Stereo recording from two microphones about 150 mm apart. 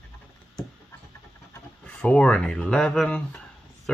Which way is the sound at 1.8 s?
5° left (ahead or behind).